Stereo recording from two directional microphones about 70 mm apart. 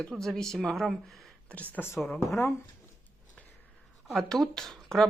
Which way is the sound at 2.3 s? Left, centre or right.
Left.